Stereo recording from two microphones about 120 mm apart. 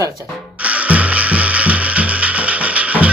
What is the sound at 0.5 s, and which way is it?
Music, 10° right (ahead or behind).